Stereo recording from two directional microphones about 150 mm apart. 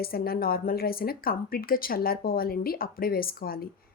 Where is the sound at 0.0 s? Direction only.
90° left.